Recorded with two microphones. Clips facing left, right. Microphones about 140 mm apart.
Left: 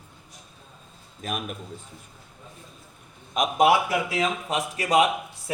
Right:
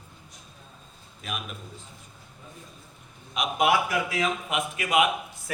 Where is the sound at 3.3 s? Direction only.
40° left (ahead or behind).